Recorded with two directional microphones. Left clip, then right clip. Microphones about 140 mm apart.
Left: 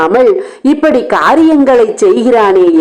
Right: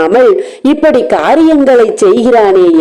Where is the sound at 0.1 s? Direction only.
25° right (ahead or behind).